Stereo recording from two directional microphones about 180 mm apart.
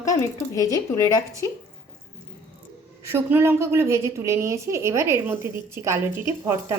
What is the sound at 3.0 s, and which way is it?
A woman's voice, 15° right (ahead or behind).